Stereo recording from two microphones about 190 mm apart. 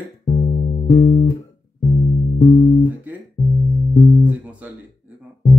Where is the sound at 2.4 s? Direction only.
40° left (ahead or behind).